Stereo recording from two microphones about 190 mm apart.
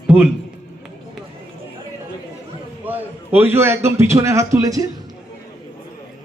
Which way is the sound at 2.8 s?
10° right (ahead or behind).